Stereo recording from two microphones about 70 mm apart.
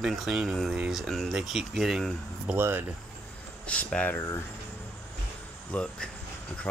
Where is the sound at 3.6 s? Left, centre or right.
Centre.